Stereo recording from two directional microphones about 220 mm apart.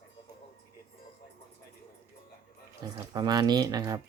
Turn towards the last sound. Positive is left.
turn(degrees=-15)  # may be behind; listen again after turning